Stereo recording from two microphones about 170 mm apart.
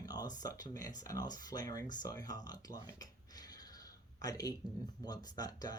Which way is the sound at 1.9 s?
25° left (ahead or behind).